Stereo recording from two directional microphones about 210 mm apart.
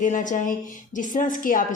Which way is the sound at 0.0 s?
35° left (ahead or behind).